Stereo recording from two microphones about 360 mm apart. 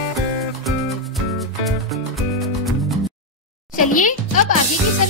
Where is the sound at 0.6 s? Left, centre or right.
Centre.